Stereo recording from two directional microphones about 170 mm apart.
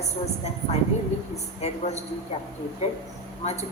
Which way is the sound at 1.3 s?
40° left (ahead or behind).